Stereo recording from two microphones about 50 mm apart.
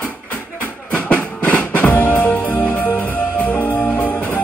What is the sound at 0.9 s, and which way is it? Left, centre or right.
Music, left.